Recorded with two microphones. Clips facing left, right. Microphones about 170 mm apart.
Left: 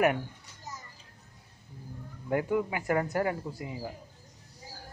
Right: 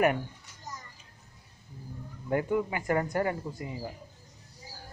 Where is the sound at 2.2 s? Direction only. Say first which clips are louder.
Even; 5° left (ahead or behind).